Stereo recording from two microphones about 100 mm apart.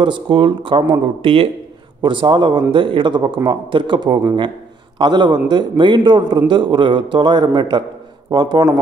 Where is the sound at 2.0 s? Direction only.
55° right (ahead or behind).